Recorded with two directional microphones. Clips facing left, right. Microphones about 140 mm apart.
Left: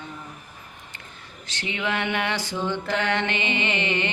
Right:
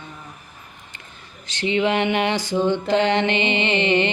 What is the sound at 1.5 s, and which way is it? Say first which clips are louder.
Mantra: right 8 dB; 20° right (ahead or behind).